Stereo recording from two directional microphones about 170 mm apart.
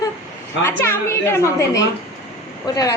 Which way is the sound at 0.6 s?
15° left (ahead or behind).